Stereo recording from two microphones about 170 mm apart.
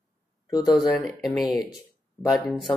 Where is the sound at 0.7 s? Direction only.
Centre (ahead or behind).